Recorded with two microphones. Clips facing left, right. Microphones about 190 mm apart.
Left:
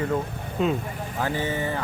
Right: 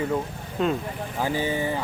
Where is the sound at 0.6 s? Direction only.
5° left (ahead or behind).